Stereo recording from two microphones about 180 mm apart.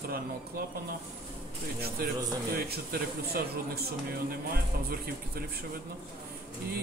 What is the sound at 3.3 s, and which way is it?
Speech, 60° right (ahead or behind).